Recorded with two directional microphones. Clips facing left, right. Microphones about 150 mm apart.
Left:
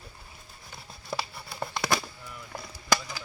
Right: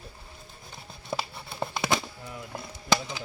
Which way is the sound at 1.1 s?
20° right (ahead or behind).